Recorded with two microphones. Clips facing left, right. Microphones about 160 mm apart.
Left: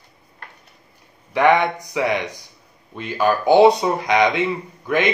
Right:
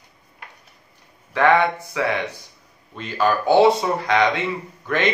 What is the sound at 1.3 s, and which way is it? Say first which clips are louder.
A man's voice: left 1 dB; 15° left (ahead or behind).